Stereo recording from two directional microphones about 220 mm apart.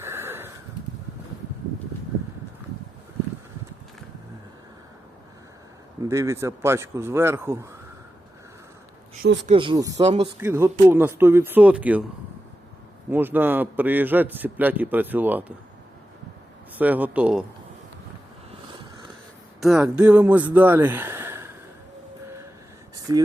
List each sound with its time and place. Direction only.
0.0 s a sound: 10° right (ahead or behind)
6.1 s a man's voice: 15° right (ahead or behind)
9.2 s speech: 50° right (ahead or behind)
9.5 s speech: 20° right (ahead or behind)
10.4 s a man's voice: 10° right (ahead or behind)
13.1 s a man's voice: 10° right (ahead or behind)
16.7 s a man's voice: 5° right (ahead or behind)
19.5 s speech: centre (ahead or behind)
23.1 s a man's voice: 15° right (ahead or behind)